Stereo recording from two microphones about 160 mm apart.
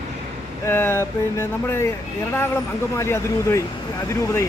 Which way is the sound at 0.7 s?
15° left (ahead or behind).